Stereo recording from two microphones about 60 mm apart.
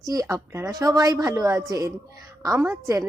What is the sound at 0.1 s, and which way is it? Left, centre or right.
A woman's voice, right.